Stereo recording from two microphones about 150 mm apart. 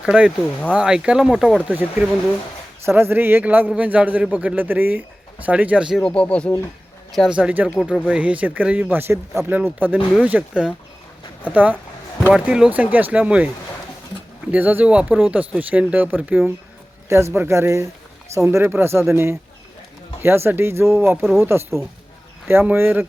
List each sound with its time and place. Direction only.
0.0 s speech: 5° right (ahead or behind)
6.0 s speech: 5° left (ahead or behind)
7.1 s speech: 5° right (ahead or behind)
14.5 s speech: 10° right (ahead or behind)
21.2 s speech: centre (ahead or behind)
21.4 s speech: 15° right (ahead or behind)